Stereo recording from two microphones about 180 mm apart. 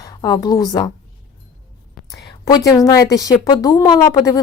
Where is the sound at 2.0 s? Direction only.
20° left (ahead or behind).